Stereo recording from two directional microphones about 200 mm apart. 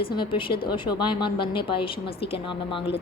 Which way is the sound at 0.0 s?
25° left (ahead or behind).